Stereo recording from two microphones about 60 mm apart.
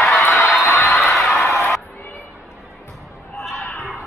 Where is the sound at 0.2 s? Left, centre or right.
Left.